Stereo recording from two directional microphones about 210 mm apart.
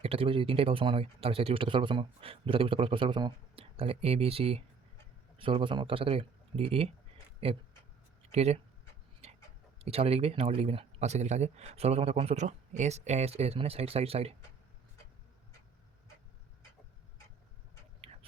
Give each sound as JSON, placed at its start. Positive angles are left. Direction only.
{"t": 0.0, "sound": "speech", "side_deg": -25}
{"t": 9.2, "sound": "chicken", "side_deg": -30}
{"t": 9.7, "sound": "speech", "side_deg": -30}